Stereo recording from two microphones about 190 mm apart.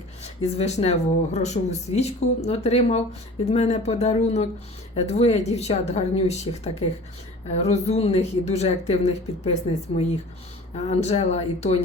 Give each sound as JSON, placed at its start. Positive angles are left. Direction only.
{"t": 0.4, "sound": "speech", "side_deg": 35}